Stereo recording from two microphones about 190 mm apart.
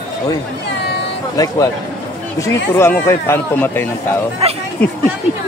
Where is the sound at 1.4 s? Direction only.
20° left (ahead or behind).